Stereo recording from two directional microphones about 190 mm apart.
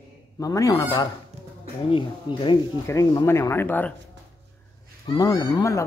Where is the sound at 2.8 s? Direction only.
15° left (ahead or behind).